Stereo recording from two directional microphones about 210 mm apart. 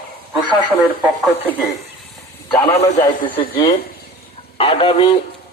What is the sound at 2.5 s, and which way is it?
Speech, 25° left (ahead or behind).